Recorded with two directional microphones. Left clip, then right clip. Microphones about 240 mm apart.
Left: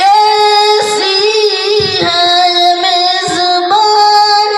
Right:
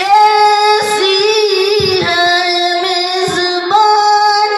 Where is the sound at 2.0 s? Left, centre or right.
Left.